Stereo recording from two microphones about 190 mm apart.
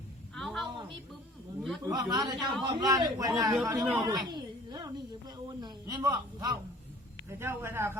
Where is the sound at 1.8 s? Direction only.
20° right (ahead or behind).